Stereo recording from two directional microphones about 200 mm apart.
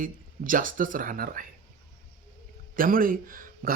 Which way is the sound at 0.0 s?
45° right (ahead or behind).